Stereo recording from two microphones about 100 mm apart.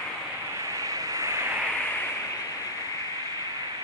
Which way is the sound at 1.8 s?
20° left (ahead or behind).